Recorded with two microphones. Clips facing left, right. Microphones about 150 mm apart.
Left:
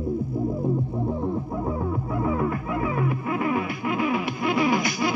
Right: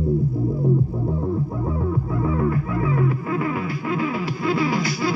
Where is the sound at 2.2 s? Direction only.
20° left (ahead or behind).